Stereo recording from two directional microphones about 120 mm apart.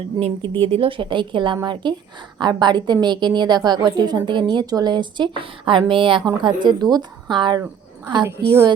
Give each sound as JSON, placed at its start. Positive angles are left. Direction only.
{"t": 0.2, "sound": "a woman's voice", "side_deg": -45}